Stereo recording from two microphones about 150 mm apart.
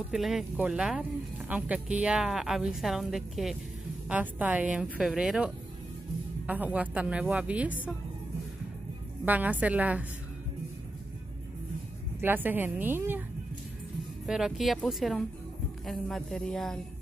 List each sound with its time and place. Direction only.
0.1 s a woman's voice: centre (ahead or behind)
9.2 s a woman's voice: 10° right (ahead or behind)
12.2 s a woman's voice: 15° right (ahead or behind)
14.2 s a woman's voice: 5° right (ahead or behind)